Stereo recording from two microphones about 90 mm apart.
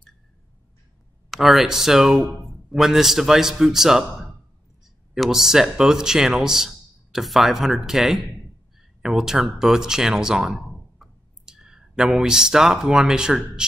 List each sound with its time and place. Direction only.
1.3 s a man's voice: centre (ahead or behind)